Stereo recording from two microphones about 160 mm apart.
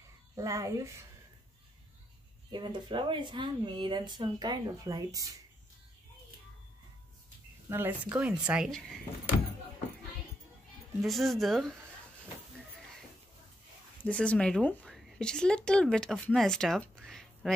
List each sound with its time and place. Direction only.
0.4 s speech: 20° right (ahead or behind)
2.5 s speech: 30° right (ahead or behind)
7.7 s speech: 10° right (ahead or behind)
11.0 s speech: centre (ahead or behind)
14.0 s speech: 5° left (ahead or behind)